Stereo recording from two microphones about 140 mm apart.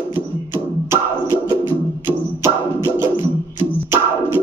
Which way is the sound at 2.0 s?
20° right (ahead or behind).